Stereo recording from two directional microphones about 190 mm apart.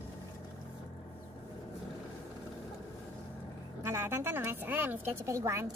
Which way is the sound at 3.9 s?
15° right (ahead or behind).